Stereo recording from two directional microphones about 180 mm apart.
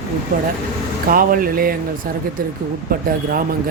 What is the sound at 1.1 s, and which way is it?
Speech, 50° right (ahead or behind).